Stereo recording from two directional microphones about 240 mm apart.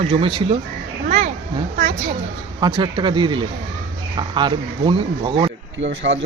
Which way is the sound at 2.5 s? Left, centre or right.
Centre.